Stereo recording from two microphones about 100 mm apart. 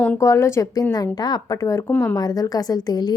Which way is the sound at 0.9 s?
40° left (ahead or behind).